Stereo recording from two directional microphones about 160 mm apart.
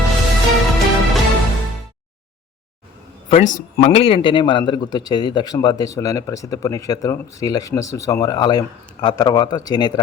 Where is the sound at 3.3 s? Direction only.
50° left (ahead or behind).